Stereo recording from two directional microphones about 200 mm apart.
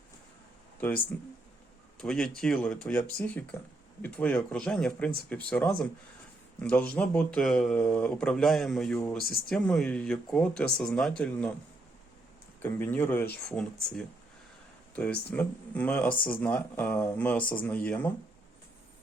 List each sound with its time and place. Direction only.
0.8 s speech: 10° left (ahead or behind)
12.6 s speech: 10° left (ahead or behind)